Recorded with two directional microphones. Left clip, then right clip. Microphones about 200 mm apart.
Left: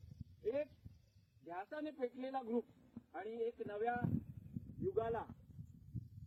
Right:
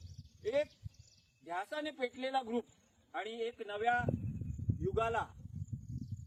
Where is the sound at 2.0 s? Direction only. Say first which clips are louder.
Right 7 dB; 15° right (ahead or behind).